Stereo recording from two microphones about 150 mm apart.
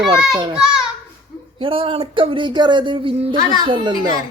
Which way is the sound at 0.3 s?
35° right (ahead or behind).